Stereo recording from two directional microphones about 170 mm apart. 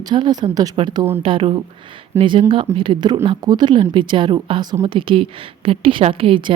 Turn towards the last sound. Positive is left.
turn(degrees=-30)  # may be behind; listen again after turning